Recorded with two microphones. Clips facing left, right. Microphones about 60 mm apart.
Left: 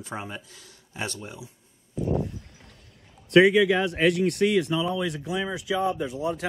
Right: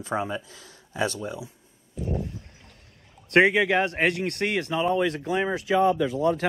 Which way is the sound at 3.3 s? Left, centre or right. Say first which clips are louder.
Left 2 dB; right.